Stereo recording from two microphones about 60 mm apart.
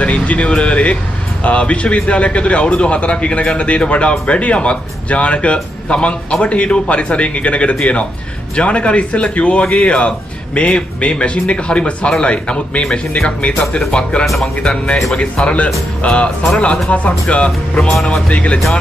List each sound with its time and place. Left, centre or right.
0.0 s a man's voice: left
14.2 s speech: centre
14.6 s a man's voice: centre